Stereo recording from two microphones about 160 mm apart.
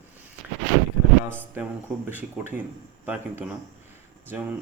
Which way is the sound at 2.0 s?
15° right (ahead or behind).